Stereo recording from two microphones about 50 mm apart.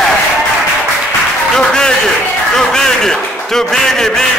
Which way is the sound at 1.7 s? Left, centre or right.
Centre.